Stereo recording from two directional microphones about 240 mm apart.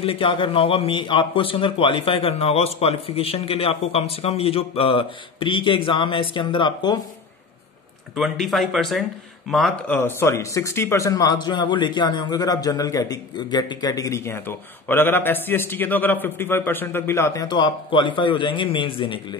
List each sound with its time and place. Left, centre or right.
0.0 s a man's voice: left
8.2 s speech: centre; by 19.1 s left